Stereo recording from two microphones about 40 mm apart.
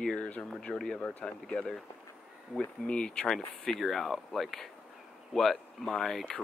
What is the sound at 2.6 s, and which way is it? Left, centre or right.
Speech, left.